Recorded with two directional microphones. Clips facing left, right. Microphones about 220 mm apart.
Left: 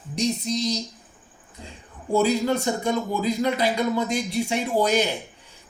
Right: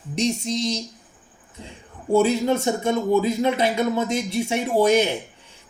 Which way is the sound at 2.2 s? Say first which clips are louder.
Right 2 dB; 25° right (ahead or behind).